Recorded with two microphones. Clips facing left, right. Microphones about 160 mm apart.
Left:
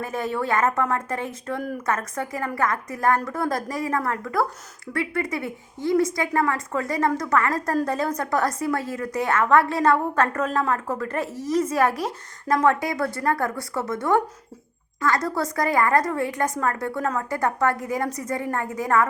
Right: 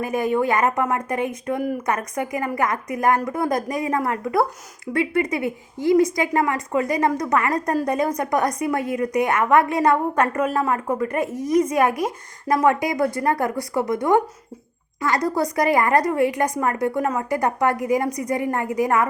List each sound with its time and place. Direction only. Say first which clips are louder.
0.0 s a woman's voice: right 6 dB; 15° right (ahead or behind)